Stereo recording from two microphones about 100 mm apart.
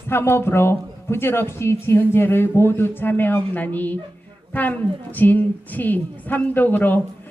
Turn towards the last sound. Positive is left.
turn(degrees=20)  # may be behind; listen again after turning